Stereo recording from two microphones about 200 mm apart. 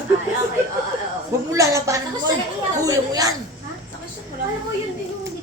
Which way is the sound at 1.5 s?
15° right (ahead or behind).